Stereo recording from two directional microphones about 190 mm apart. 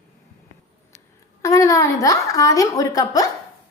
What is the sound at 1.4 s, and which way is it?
A woman's voice, 15° left (ahead or behind).